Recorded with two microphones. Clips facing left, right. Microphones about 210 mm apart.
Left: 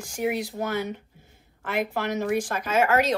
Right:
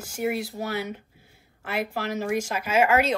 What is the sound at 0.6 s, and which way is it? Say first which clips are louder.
Speech: left 4 dB; 45° left (ahead or behind).